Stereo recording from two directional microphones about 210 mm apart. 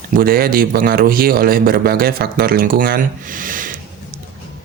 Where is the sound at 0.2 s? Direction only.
45° right (ahead or behind).